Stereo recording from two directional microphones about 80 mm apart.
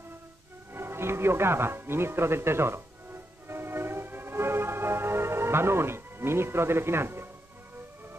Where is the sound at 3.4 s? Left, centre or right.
Right.